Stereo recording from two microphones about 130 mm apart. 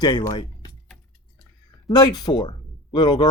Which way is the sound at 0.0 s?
30° left (ahead or behind).